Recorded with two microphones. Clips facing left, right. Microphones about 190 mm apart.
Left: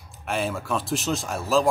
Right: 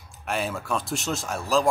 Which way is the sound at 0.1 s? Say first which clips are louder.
Left 1 dB; centre (ahead or behind).